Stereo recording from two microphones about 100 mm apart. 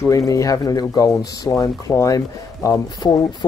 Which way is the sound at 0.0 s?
35° left (ahead or behind).